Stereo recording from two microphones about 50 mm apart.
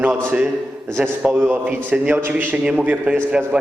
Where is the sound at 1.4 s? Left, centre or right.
Right.